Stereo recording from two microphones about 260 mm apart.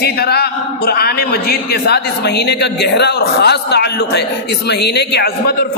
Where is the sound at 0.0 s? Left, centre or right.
Left.